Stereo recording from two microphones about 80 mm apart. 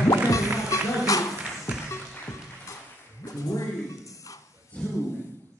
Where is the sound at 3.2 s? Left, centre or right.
Left.